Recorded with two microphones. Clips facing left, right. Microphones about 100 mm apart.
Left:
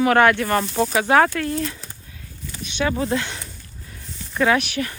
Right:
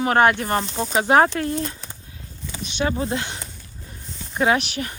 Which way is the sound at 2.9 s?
30° right (ahead or behind).